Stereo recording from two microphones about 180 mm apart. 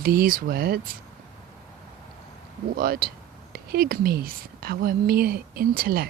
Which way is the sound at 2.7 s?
55° right (ahead or behind).